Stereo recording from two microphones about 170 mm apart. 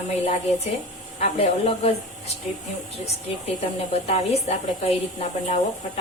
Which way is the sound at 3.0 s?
40° left (ahead or behind).